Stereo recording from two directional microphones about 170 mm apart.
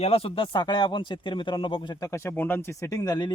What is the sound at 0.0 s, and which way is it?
Speech, 35° left (ahead or behind).